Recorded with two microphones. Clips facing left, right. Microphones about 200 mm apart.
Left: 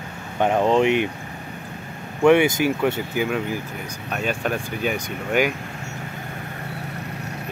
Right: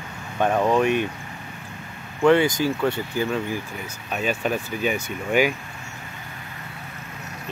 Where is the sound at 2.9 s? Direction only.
15° left (ahead or behind).